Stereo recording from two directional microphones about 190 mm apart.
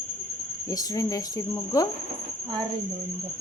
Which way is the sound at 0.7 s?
20° left (ahead or behind).